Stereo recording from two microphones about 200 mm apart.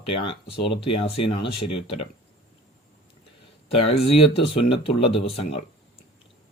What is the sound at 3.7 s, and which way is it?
Speech, 30° left (ahead or behind).